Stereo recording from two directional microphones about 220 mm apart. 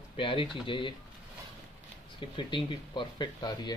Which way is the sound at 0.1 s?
25° left (ahead or behind).